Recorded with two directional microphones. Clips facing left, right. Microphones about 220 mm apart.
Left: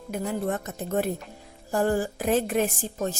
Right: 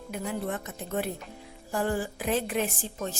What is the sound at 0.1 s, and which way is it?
A woman's voice, 45° left (ahead or behind).